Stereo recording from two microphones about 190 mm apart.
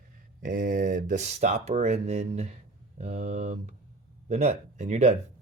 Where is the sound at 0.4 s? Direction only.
45° right (ahead or behind).